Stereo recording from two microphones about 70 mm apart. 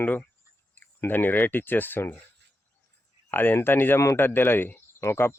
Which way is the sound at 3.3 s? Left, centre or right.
Left.